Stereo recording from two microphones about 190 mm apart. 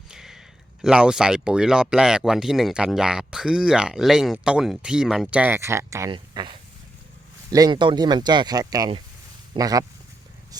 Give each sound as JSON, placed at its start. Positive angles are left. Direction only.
{"t": 0.1, "sound": "speech", "side_deg": 0}